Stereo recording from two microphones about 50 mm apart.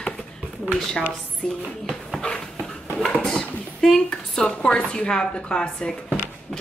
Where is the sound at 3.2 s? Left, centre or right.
Centre.